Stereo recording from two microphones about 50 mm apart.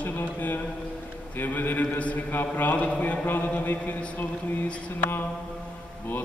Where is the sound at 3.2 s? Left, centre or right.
Left.